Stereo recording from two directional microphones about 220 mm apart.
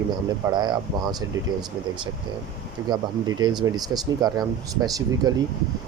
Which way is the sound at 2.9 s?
20° right (ahead or behind).